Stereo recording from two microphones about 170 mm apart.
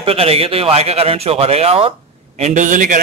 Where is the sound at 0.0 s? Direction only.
35° right (ahead or behind).